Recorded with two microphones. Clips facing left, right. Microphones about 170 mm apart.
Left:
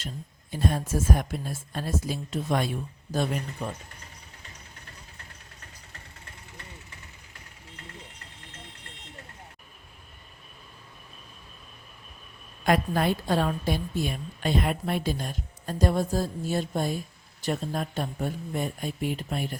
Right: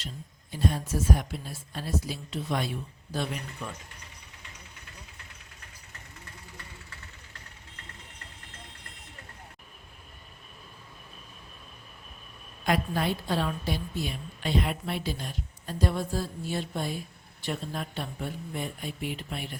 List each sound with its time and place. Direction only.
0.5 s a woman's voice: 50° left (ahead or behind)
12.6 s a woman's voice: 50° left (ahead or behind)